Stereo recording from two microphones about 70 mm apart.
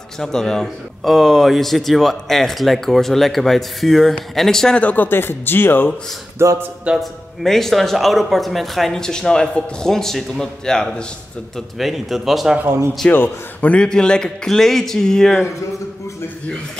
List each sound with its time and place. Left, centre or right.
0.2 s a man's voice: centre
4.8 s speech: left
6.3 s speech: right
7.0 s a man's voice: centre
13.1 s a man's voice: left; by 15.5 s centre